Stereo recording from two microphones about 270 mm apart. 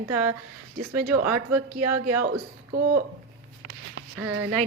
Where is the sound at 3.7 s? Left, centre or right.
Right.